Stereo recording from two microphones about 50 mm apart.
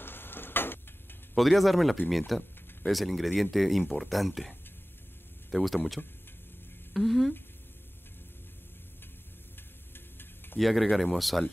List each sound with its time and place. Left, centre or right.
0.0 s a sound: left
1.3 s speech: centre
6.0 s speech: left
6.9 s speech: centre
9.9 s music: left
10.6 s speech: centre